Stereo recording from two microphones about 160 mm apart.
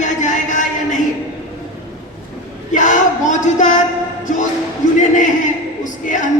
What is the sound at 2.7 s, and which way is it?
A man's voice, 50° left (ahead or behind).